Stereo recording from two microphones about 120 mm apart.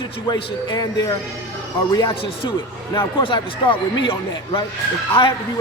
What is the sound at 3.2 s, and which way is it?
A man's voice, 45° left (ahead or behind).